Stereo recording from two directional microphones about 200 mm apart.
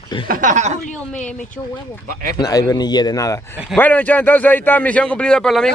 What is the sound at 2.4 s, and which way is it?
Speech, 15° left (ahead or behind).